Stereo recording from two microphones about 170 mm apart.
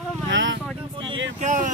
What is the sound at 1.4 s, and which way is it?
Speech, 45° right (ahead or behind).